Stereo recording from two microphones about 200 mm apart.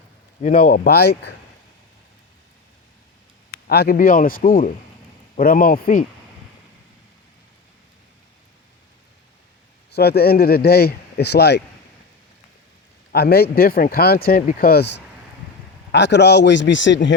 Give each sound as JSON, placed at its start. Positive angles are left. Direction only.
{"t": 0.4, "sound": "speech", "side_deg": 45}
{"t": 3.7, "sound": "speech", "side_deg": 50}
{"t": 9.9, "sound": "speech", "side_deg": 55}
{"t": 13.1, "sound": "speech", "side_deg": 50}